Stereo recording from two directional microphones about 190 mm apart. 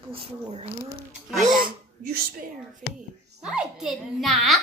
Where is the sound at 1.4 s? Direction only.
45° right (ahead or behind).